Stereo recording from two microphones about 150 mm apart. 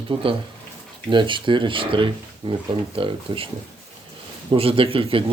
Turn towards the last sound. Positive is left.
turn(degrees=-35)  # may be behind; listen again after turning